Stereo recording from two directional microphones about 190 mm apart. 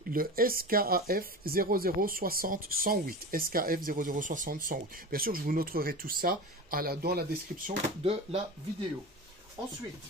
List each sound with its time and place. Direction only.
0.1 s speech: 50° right (ahead or behind)
8.0 s speech: 30° right (ahead or behind)